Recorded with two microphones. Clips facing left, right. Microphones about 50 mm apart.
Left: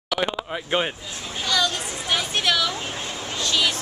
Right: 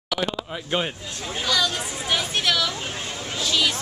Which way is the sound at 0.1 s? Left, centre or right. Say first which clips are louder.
Left 2 dB; centre.